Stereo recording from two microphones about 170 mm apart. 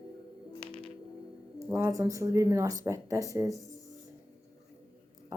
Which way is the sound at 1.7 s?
15° right (ahead or behind).